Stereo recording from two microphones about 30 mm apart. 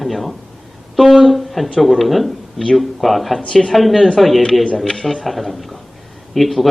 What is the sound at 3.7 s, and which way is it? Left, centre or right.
A man's voice, centre.